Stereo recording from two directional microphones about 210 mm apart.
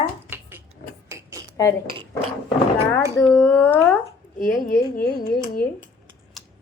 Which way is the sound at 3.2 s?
5° left (ahead or behind).